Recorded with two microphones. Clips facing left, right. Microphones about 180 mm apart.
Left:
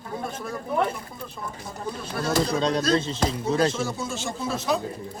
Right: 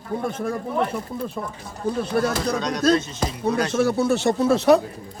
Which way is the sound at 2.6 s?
25° left (ahead or behind).